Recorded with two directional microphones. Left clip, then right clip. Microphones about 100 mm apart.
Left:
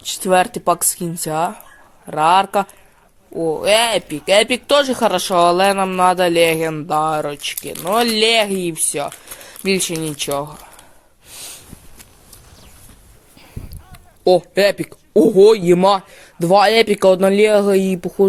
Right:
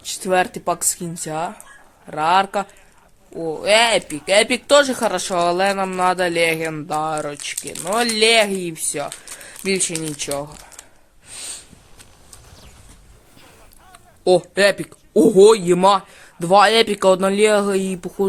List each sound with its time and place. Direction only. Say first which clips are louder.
0.0 s speech: left 4 dB; 50° left (ahead or behind)
4.3 s speech: left 1 dB; 50° left (ahead or behind)
11.3 s snort: right 1 dB; 35° left (ahead or behind)
14.3 s speech: left 2 dB; 45° left (ahead or behind)